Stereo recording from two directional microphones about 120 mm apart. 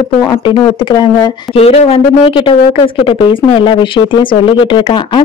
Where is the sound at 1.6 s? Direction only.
55° left (ahead or behind).